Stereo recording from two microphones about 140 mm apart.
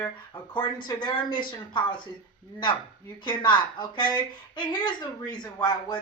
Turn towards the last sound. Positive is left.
turn(degrees=30)  # may be behind; listen again after turning